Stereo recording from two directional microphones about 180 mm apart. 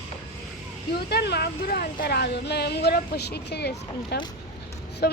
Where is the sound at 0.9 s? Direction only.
65° left (ahead or behind).